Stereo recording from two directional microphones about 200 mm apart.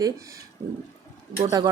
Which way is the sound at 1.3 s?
15° right (ahead or behind).